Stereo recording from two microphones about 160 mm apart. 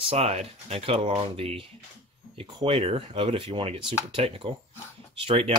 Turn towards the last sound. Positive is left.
turn(degrees=-35)  # may be behind; listen again after turning